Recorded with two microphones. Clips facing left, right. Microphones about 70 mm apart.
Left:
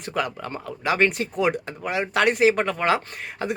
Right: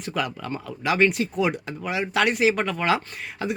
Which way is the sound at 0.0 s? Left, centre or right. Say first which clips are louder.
Left 1 dB; left.